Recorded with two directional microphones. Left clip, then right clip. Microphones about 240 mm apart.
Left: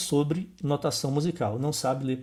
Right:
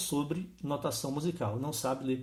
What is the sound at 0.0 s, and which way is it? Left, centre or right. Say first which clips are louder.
Speech: left 7 dB; left.